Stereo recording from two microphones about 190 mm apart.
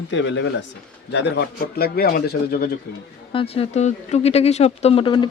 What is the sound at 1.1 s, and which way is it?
A man's voice, 65° left (ahead or behind).